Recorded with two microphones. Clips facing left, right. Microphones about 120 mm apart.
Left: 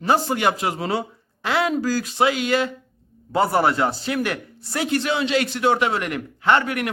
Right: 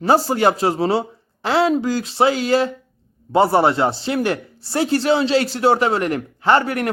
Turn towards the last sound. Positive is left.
turn(degrees=-35)  # may be behind; listen again after turning